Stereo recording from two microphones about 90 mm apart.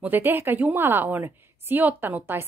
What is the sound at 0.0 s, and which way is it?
Speech, 20° right (ahead or behind).